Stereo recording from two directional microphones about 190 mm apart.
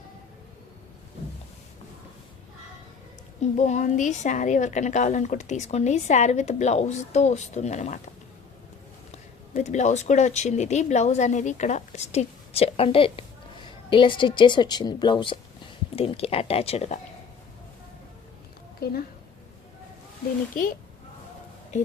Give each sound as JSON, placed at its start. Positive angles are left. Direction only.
{"t": 3.4, "sound": "a woman's voice", "side_deg": 40}
{"t": 9.1, "sound": "a woman's voice", "side_deg": 40}
{"t": 18.8, "sound": "a woman's voice", "side_deg": 55}